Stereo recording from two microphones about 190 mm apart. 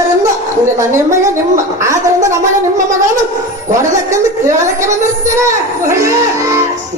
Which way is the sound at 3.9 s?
15° right (ahead or behind).